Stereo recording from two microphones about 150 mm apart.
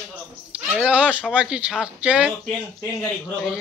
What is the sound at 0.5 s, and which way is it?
Speech, 10° right (ahead or behind).